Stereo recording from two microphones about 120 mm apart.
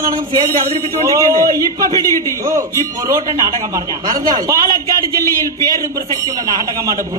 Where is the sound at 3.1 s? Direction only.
30° right (ahead or behind).